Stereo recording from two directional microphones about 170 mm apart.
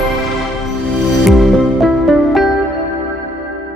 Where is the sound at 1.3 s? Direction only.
Centre (ahead or behind).